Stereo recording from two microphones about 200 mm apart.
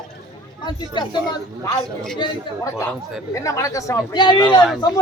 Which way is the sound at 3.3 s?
15° left (ahead or behind).